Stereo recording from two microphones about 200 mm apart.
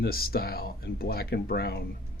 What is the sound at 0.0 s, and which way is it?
Speech, 50° left (ahead or behind).